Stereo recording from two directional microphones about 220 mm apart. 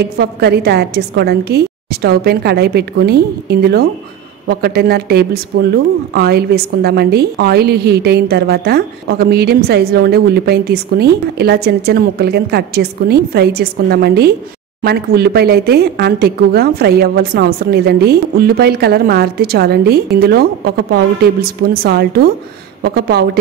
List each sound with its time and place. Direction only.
0.2 s speech: 45° right (ahead or behind)